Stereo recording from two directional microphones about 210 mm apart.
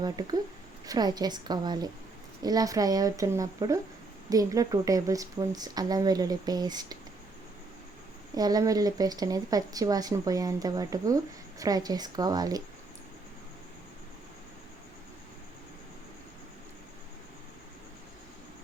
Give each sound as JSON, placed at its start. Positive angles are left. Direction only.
{"t": 0.0, "sound": "a woman's voice", "side_deg": -20}
{"t": 8.4, "sound": "speech", "side_deg": -20}